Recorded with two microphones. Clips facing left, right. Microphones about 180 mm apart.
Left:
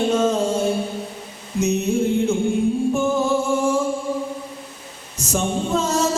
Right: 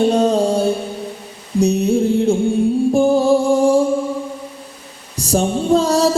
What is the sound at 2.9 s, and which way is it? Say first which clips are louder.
Music: right 6 dB; 35° right (ahead or behind).